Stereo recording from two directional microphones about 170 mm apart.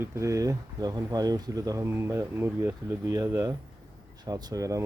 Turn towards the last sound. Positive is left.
turn(degrees=-20)  # may be behind; listen again after turning